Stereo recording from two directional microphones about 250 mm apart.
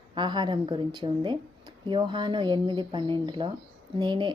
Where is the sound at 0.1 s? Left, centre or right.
Centre.